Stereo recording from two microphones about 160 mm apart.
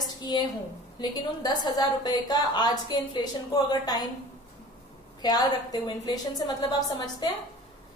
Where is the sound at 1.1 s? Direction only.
25° left (ahead or behind).